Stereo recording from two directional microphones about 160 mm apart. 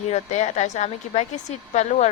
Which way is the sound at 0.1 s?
45° left (ahead or behind).